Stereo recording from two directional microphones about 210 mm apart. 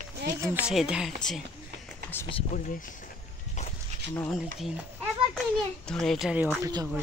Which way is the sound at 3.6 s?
35° left (ahead or behind).